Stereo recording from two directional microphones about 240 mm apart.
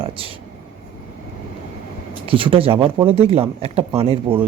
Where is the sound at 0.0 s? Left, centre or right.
Right.